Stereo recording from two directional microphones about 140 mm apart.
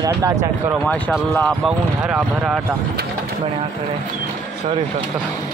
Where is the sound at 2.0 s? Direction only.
10° right (ahead or behind).